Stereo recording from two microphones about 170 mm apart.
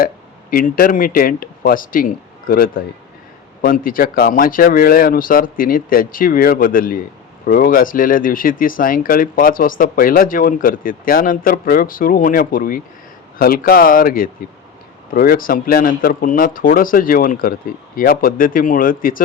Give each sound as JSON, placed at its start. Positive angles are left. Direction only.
{"t": 0.5, "sound": "speech", "side_deg": 55}